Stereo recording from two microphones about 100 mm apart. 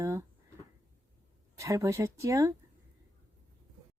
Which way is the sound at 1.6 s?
30° right (ahead or behind).